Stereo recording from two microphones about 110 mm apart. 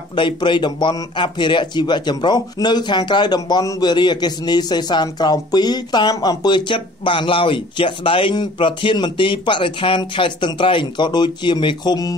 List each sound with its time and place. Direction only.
0.1 s speech: 45° left (ahead or behind)